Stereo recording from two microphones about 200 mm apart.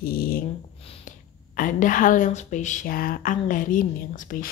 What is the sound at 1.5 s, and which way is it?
Speech, 40° left (ahead or behind).